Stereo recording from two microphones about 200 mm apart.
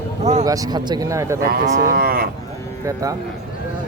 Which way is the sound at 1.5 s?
50° right (ahead or behind).